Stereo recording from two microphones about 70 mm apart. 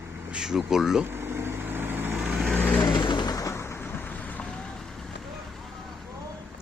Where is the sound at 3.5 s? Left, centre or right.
Left.